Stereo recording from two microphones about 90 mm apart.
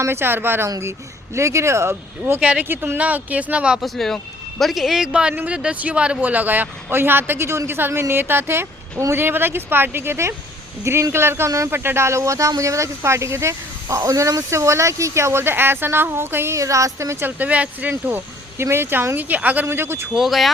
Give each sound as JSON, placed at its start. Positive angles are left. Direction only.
{"t": 0.0, "sound": "a man's voice", "side_deg": -25}
{"t": 2.4, "sound": "speech", "side_deg": -15}
{"t": 3.8, "sound": "a man's voice", "side_deg": 5}
{"t": 5.3, "sound": "a man's voice", "side_deg": -20}
{"t": 20.1, "sound": "a man's voice", "side_deg": 0}